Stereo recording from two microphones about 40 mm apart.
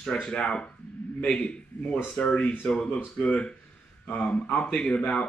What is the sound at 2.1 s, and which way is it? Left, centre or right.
Speech, left.